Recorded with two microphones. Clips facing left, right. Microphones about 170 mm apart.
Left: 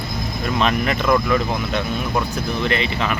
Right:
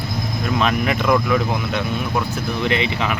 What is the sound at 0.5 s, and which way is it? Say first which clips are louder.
Speech: even; 10° right (ahead or behind).